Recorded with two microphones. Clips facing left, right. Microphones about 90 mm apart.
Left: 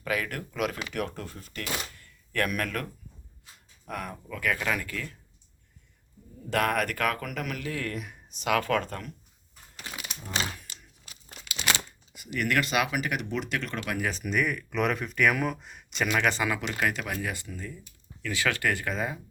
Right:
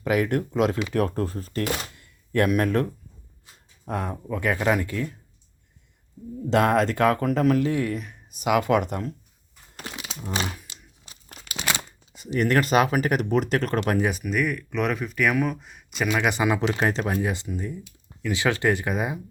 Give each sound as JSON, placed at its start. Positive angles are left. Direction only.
{"t": 0.0, "sound": "speech", "side_deg": -25}
{"t": 1.0, "sound": "speech", "side_deg": -35}
{"t": 2.0, "sound": "a sound", "side_deg": -20}
{"t": 3.8, "sound": "speech", "side_deg": -30}
{"t": 6.5, "sound": "speech", "side_deg": -25}
{"t": 8.3, "sound": "speech", "side_deg": -10}
{"t": 10.0, "sound": "crumpling", "side_deg": -20}
{"t": 10.7, "sound": "a sound", "side_deg": -25}
{"t": 12.1, "sound": "speech", "side_deg": -30}
{"t": 14.1, "sound": "speech", "side_deg": -5}
{"t": 16.7, "sound": "speech", "side_deg": -30}